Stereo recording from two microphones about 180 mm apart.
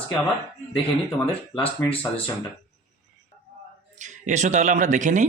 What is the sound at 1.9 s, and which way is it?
Speech, 30° left (ahead or behind).